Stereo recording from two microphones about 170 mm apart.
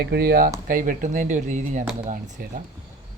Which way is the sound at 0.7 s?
50° right (ahead or behind).